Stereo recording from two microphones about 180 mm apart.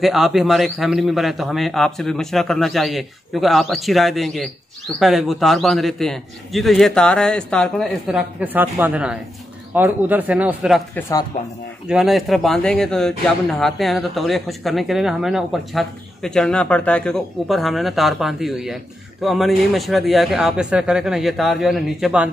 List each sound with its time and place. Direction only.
0.0 s speech: centre (ahead or behind)
11.0 s speech: 15° left (ahead or behind)
11.9 s speech: centre (ahead or behind)